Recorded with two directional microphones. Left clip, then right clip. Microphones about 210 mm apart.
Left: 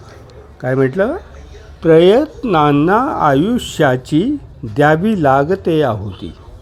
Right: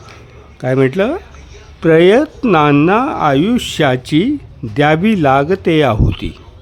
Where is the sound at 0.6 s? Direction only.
25° right (ahead or behind).